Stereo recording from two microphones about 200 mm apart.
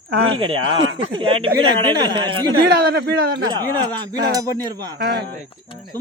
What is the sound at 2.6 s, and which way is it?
Speech, 55° right (ahead or behind).